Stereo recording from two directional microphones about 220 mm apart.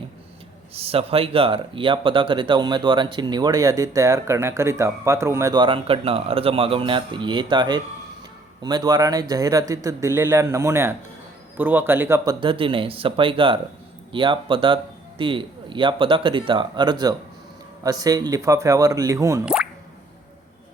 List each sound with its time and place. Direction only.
0.7 s speech: 25° right (ahead or behind)